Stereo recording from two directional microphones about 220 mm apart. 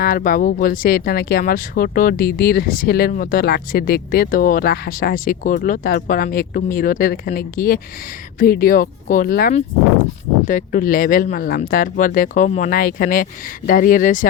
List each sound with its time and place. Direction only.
0.0 s speech: 40° left (ahead or behind)